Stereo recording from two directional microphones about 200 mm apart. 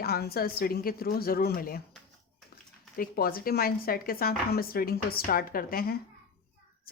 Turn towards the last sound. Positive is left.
turn(degrees=50)  # may be behind; listen again after turning